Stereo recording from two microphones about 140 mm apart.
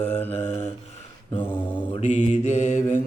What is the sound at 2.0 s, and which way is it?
Mantra, 55° left (ahead or behind).